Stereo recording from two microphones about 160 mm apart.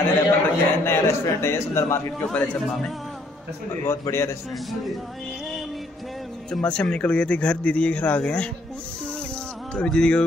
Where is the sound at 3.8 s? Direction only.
15° left (ahead or behind).